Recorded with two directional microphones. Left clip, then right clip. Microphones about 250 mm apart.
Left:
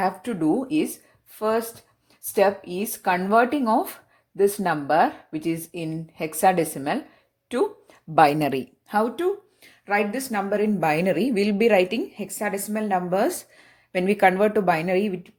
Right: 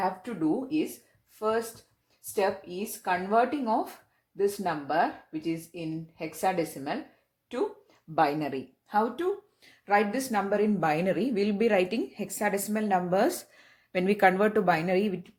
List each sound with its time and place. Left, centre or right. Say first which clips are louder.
0.0 s speech: left 5 dB; left
9.8 s a woman's voice: left 2 dB; centre